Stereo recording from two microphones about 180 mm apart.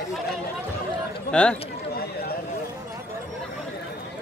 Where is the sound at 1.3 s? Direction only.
5° left (ahead or behind).